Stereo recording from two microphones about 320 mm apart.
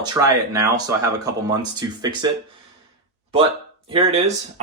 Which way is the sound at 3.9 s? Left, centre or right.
Centre.